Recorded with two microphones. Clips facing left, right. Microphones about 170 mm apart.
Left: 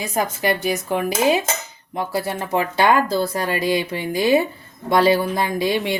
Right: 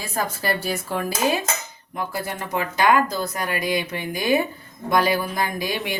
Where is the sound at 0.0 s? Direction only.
20° left (ahead or behind).